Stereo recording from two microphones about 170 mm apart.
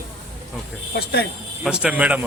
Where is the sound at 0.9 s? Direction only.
75° left (ahead or behind).